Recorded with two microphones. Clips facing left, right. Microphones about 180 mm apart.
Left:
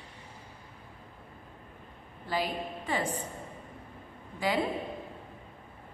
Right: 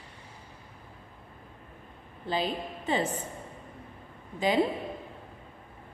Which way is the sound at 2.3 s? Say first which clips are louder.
Right 2 dB; 20° right (ahead or behind).